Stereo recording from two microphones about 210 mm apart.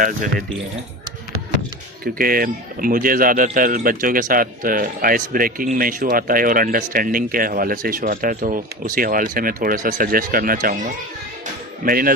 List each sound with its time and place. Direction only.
0.0 s speech: 40° right (ahead or behind)
2.1 s speech: 45° right (ahead or behind)
11.9 s speech: 40° right (ahead or behind)